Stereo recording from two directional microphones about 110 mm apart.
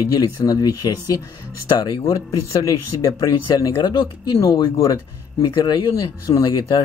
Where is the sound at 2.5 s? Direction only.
30° left (ahead or behind).